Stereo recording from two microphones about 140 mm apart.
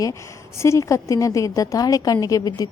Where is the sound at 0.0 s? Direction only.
20° left (ahead or behind).